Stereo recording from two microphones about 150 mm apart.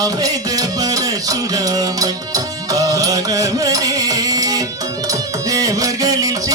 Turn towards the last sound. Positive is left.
turn(degrees=-25)  # may be behind; listen again after turning